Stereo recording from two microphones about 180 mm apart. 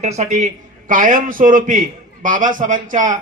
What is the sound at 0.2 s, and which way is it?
A man's voice, 40° right (ahead or behind).